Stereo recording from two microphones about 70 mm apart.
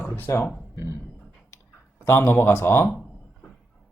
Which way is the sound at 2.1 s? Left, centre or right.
Left.